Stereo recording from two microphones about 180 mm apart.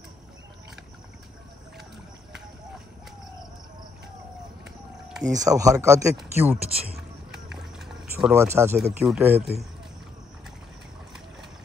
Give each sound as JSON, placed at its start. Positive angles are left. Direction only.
{"t": 5.3, "sound": "speech", "side_deg": -20}
{"t": 7.0, "sound": "run", "side_deg": 0}
{"t": 8.3, "sound": "speech", "side_deg": -15}
{"t": 8.7, "sound": "speech", "side_deg": -5}